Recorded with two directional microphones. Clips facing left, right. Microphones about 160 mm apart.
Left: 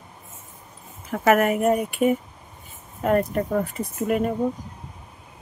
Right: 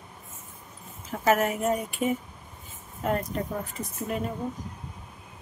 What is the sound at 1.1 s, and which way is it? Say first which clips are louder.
Speech: left 5 dB; 65° left (ahead or behind).